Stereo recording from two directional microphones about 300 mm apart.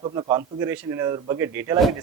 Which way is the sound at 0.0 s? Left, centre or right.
Centre.